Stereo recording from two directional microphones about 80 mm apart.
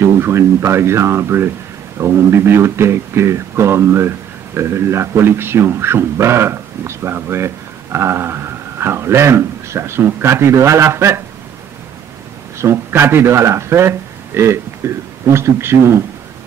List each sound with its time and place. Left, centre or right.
0.0 s speech: right
12.5 s speech: right